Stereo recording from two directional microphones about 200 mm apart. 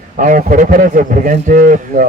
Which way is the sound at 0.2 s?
40° right (ahead or behind).